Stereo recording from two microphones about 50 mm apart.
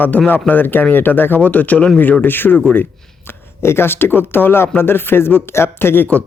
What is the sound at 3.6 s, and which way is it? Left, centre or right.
Speech, left.